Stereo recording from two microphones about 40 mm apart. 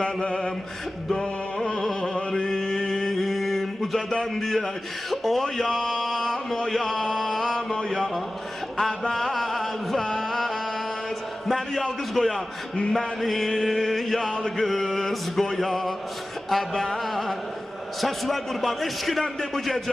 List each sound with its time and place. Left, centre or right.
0.0 s mantra: left
2.0 s a sound: centre
4.1 s a man's voice: centre
5.9 s chant: centre
7.9 s a man's voice: centre
9.1 s music: centre
11.4 s a sound: centre
12.1 s a man's voice: centre